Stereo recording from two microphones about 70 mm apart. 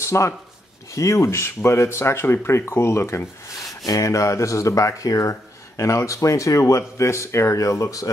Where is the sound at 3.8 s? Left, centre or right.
Left.